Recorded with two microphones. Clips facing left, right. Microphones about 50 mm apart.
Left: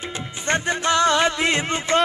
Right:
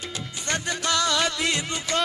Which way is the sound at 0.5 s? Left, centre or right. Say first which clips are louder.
Left 6 dB; left.